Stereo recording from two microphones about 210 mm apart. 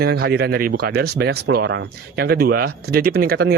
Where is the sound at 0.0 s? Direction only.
50° right (ahead or behind).